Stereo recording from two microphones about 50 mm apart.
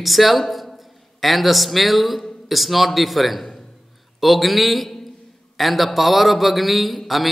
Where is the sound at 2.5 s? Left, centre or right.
Centre.